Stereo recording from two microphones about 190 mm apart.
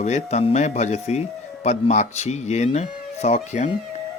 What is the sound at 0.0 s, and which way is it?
Speech, 35° left (ahead or behind).